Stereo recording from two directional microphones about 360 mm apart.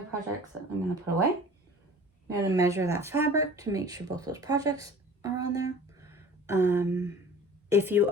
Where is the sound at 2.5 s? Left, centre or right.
Centre.